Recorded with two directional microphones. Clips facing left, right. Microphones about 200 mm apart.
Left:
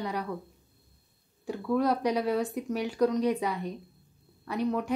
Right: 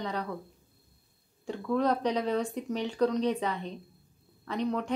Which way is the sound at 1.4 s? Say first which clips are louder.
Left 1 dB; 10° left (ahead or behind).